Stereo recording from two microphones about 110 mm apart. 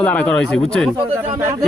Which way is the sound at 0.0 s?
10° left (ahead or behind).